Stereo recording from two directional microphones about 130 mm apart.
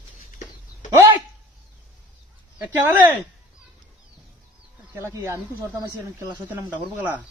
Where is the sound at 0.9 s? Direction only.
20° right (ahead or behind).